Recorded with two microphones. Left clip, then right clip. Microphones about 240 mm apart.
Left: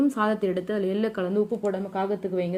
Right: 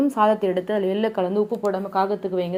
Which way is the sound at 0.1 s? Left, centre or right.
Centre.